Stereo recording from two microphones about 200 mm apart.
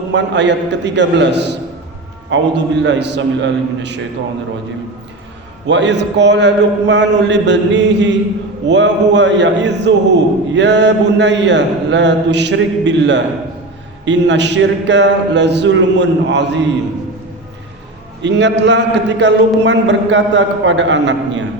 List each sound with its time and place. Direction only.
0.1 s a man's voice: 60° right (ahead or behind)
5.6 s a man's voice: 60° right (ahead or behind)
18.2 s a man's voice: 60° right (ahead or behind)